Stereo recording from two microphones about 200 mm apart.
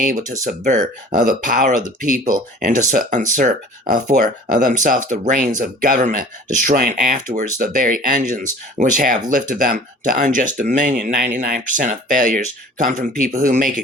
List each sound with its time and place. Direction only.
0.0 s speech: 40° right (ahead or behind)